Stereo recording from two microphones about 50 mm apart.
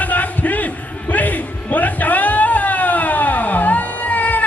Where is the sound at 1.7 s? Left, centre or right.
Left.